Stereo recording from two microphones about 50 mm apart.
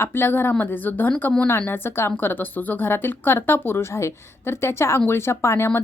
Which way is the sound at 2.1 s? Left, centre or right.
Left.